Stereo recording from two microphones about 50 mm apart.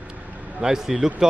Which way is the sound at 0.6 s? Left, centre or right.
Centre.